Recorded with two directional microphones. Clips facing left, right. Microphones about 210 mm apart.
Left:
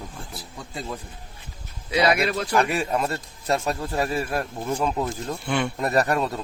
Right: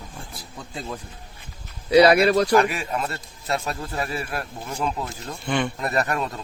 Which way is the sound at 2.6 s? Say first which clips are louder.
Left 1 dB; 35° left (ahead or behind).